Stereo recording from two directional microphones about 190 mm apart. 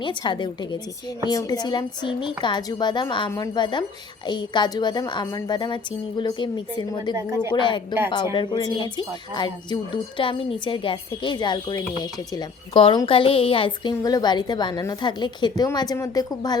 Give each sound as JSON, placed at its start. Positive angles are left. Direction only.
{"t": 0.0, "sound": "a woman's voice", "side_deg": 25}
{"t": 7.1, "sound": "a woman's voice", "side_deg": -15}
{"t": 7.5, "sound": "a woman's voice", "side_deg": 25}